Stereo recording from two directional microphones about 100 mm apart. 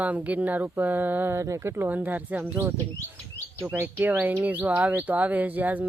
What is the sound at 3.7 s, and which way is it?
Speech, 20° right (ahead or behind).